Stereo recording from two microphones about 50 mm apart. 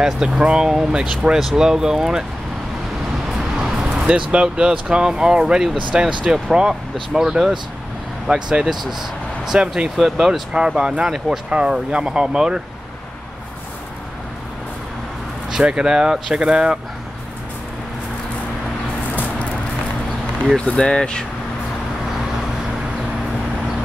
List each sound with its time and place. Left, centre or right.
0.0 s speech: centre
3.3 s speech: centre
9.5 s speech: right
10.1 s speech: centre
15.6 s speech: centre
20.5 s speech: centre